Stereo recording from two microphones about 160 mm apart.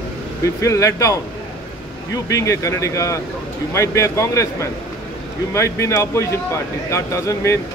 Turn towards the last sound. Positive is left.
turn(degrees=20)  # may be behind; listen again after turning